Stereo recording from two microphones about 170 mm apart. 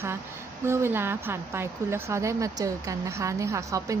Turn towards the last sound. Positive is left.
turn(degrees=-20)  # may be behind; listen again after turning